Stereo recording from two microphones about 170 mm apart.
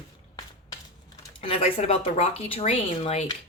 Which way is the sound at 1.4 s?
35° left (ahead or behind).